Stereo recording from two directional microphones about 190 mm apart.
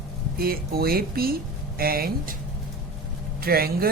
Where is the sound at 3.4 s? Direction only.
50° right (ahead or behind).